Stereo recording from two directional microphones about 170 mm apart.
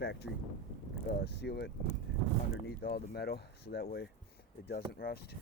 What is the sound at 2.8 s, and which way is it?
Speech, 65° left (ahead or behind).